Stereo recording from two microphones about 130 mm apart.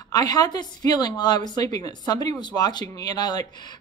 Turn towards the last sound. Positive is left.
turn(degrees=30)  # may be behind; listen again after turning